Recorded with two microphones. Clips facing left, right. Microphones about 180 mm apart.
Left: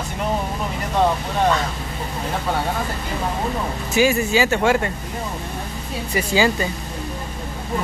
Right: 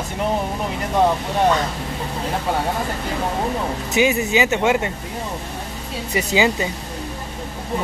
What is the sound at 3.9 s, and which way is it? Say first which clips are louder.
Speech: left 1 dB; 20° right (ahead or behind).